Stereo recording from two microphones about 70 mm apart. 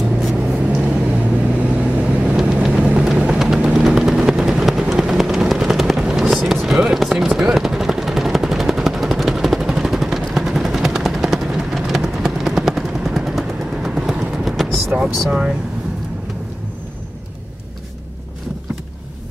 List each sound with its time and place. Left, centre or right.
0.6 s vehicle: centre
6.8 s a sound: centre
15.1 s vehicle: centre